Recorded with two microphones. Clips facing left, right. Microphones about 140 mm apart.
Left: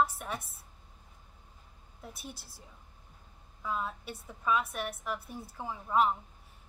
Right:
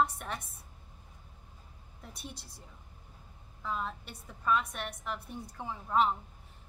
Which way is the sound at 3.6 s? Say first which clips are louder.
Left 1 dB; 5° left (ahead or behind).